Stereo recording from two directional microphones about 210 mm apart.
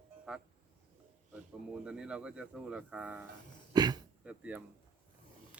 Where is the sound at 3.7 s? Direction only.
20° right (ahead or behind).